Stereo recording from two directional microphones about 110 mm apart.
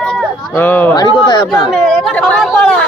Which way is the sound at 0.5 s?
15° left (ahead or behind).